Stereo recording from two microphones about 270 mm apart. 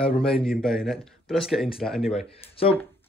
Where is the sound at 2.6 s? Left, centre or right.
Left.